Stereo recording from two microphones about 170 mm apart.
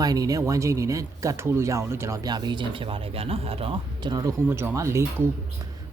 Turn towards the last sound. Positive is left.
turn(degrees=-15)  # may be behind; listen again after turning